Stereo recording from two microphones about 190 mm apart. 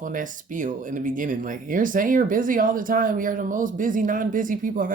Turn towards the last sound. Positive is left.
turn(degrees=-45)  # may be behind; listen again after turning